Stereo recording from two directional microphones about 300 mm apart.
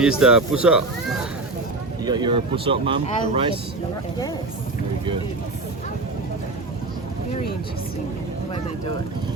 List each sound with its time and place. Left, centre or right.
0.0 s speech: centre
2.0 s speech: centre